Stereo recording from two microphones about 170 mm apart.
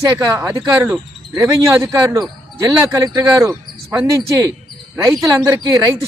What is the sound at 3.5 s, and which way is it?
Speech, 5° right (ahead or behind).